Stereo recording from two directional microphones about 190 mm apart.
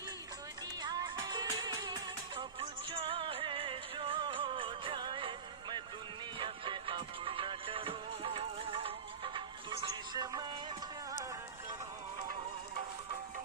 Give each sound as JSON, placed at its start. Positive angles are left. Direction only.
{"t": 0.8, "sound": "music", "side_deg": -20}